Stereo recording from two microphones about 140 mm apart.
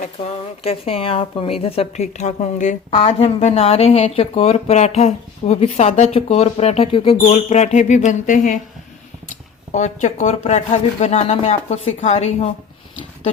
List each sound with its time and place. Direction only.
0.6 s speech: 45° left (ahead or behind); by 2.7 s 60° left (ahead or behind)
2.9 s speech: 45° left (ahead or behind); by 8.5 s 65° left (ahead or behind)
9.7 s speech: 60° left (ahead or behind)